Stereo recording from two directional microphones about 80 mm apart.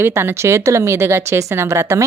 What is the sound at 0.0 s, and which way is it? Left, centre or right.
Speech, right.